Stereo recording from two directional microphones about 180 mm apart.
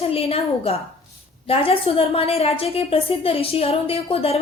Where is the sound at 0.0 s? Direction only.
35° left (ahead or behind).